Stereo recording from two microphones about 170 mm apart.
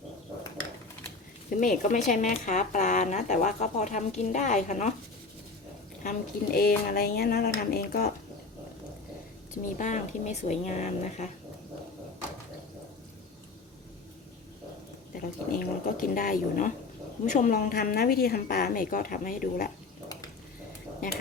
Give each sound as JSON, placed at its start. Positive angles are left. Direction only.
{"t": 1.5, "sound": "speech", "side_deg": 50}
{"t": 6.0, "sound": "a woman's voice", "side_deg": 55}
{"t": 9.6, "sound": "speech", "side_deg": 50}
{"t": 15.1, "sound": "a woman's voice", "side_deg": 55}